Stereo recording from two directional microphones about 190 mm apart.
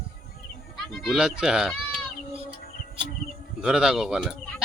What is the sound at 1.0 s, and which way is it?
Speech, centre (ahead or behind).